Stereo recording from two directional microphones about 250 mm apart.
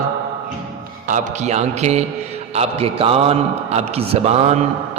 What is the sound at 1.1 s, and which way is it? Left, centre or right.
A man's voice, right.